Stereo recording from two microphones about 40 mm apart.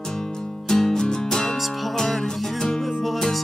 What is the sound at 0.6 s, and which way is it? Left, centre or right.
Music, centre.